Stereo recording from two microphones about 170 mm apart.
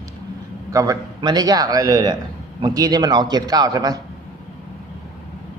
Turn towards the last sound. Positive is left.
turn(degrees=-20)  # may be behind; listen again after turning